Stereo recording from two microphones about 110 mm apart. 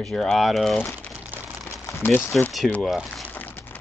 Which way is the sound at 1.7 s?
25° left (ahead or behind).